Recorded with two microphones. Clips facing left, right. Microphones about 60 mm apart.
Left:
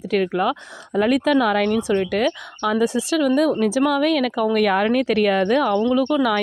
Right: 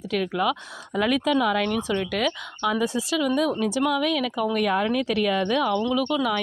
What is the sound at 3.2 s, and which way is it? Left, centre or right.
Speech, left.